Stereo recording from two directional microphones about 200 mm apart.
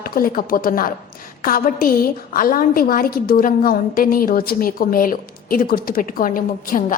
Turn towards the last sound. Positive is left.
turn(degrees=45)  # may be behind; listen again after turning